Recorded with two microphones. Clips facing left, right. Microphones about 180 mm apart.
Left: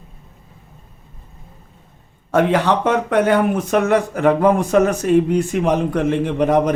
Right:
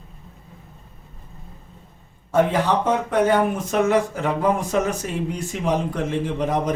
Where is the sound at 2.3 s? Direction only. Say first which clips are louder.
Left 3 dB; 75° left (ahead or behind).